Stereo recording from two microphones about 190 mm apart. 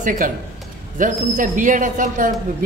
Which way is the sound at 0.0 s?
45° right (ahead or behind).